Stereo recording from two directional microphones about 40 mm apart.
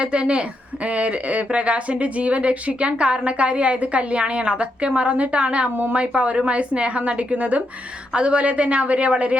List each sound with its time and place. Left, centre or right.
0.0 s a woman's voice: right